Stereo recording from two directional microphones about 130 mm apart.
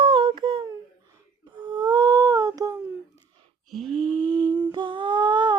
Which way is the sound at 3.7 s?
5° left (ahead or behind).